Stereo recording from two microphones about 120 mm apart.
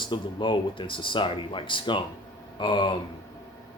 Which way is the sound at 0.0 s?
40° left (ahead or behind).